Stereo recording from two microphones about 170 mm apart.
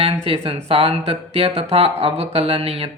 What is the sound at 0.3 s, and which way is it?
Speech, 35° right (ahead or behind).